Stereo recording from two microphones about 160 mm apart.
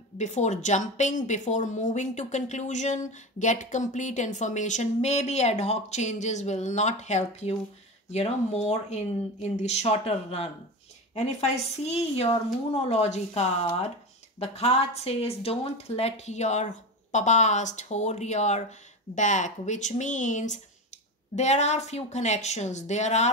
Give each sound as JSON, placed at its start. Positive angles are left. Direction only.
{"t": 0.2, "sound": "a woman's voice", "side_deg": 45}